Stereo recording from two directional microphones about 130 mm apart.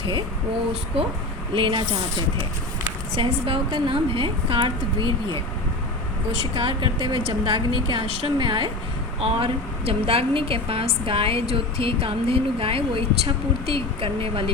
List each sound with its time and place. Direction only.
1.5 s a woman's voice: 40° right (ahead or behind)
3.2 s a woman's voice: 40° right (ahead or behind)
6.4 s a woman's voice: 40° right (ahead or behind)